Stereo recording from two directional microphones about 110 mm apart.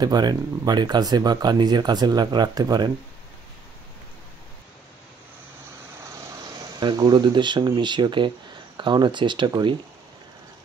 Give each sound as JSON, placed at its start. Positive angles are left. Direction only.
{"t": 0.0, "sound": "speech", "side_deg": -40}
{"t": 6.4, "sound": "speech", "side_deg": -40}